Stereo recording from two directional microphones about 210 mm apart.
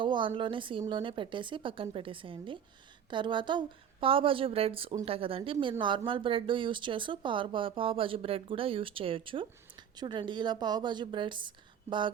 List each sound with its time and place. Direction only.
0.0 s speech: 25° right (ahead or behind)